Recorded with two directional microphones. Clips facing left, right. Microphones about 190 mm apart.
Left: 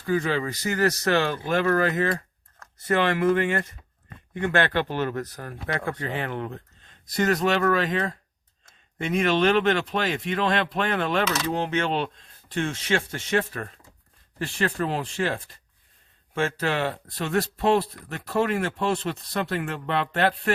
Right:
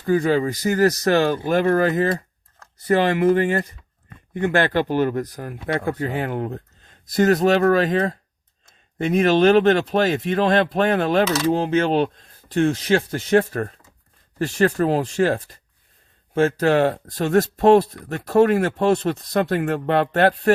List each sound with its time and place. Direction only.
0.0 s speech: 40° right (ahead or behind)
2.7 s speech: 35° right (ahead or behind)
5.2 s speech: 20° right (ahead or behind); by 20.5 s 45° right (ahead or behind)